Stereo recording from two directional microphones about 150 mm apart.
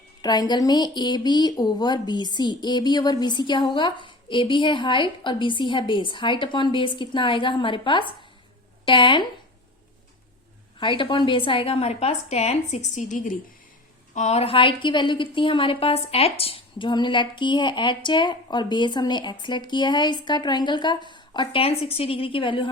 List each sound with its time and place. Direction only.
0.2 s a woman's voice: 25° left (ahead or behind)
10.8 s a woman's voice: 35° left (ahead or behind)